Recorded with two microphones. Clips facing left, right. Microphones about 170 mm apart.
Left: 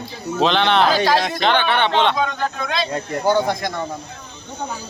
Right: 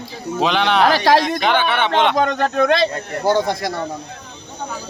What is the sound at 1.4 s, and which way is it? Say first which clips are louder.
Speech: even; 5° right (ahead or behind).